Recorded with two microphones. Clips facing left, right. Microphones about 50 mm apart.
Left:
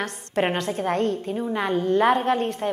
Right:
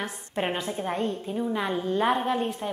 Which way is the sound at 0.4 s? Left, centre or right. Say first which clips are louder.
Left 5 dB; left.